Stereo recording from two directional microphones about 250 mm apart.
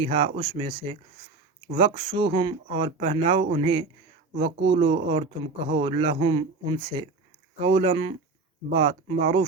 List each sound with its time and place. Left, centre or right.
0.0 s speech: right